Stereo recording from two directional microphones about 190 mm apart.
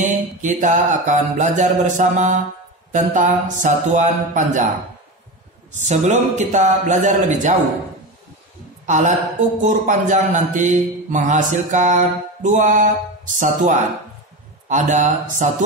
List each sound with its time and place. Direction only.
0.0 s mantra: 40° right (ahead or behind)
5.7 s mantra: 40° right (ahead or behind)
8.8 s a woman's voice: 40° right (ahead or behind)
9.6 s mantra: 40° right (ahead or behind)